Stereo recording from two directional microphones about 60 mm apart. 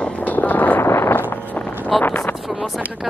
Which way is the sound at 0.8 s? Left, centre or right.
Left.